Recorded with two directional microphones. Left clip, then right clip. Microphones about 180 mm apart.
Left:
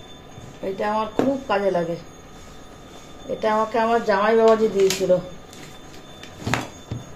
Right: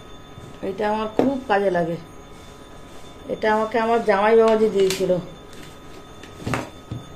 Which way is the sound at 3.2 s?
25° right (ahead or behind).